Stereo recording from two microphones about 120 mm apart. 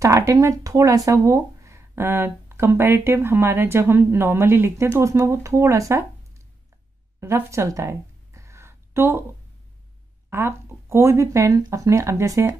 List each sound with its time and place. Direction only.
0.0 s speech: 25° right (ahead or behind)
7.2 s a sound: 25° right (ahead or behind)
10.3 s speech: 20° right (ahead or behind)